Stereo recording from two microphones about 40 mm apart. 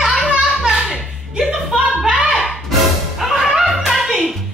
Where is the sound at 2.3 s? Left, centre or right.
Centre.